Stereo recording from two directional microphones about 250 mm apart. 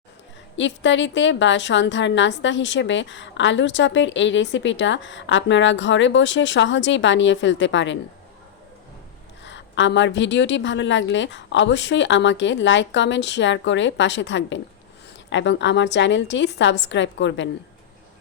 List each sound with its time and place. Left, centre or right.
0.5 s a woman's voice: left
9.4 s a woman's voice: left